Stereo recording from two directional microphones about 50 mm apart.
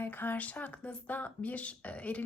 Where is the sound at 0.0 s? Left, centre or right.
Left.